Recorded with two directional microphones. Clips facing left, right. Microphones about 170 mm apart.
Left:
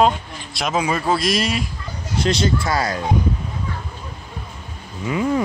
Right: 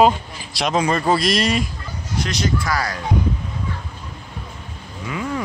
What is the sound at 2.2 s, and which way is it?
Speech, 30° left (ahead or behind).